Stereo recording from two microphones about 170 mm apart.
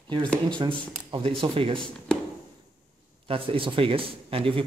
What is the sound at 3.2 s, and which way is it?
Speech, 30° right (ahead or behind).